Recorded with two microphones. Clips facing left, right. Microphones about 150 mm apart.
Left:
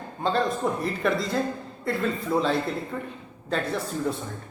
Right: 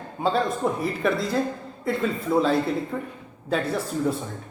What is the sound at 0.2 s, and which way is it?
A man's voice, 5° right (ahead or behind).